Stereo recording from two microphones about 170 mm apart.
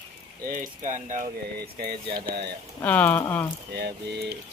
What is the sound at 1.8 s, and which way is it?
Speech, 70° right (ahead or behind).